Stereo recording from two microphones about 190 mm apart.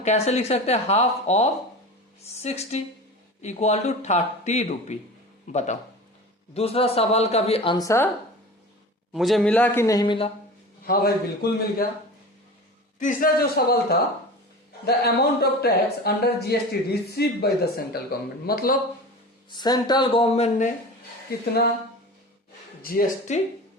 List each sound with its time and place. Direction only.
0.0 s a woman's voice: 35° left (ahead or behind); by 8.1 s 15° left (ahead or behind)
9.1 s a man's voice: centre (ahead or behind); by 10.2 s 20° left (ahead or behind)
10.8 s a man's voice: 50° left (ahead or behind)
13.0 s a man's voice: 45° left (ahead or behind)
19.5 s speech: 20° left (ahead or behind)
21.2 s a man's voice: 55° left (ahead or behind)
22.8 s a man's voice: 50° left (ahead or behind)